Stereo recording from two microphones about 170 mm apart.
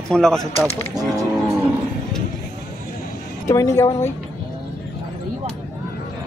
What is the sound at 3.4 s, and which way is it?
Speech, 20° left (ahead or behind).